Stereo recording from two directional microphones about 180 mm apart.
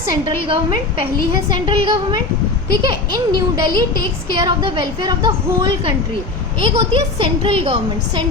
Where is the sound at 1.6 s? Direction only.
30° right (ahead or behind).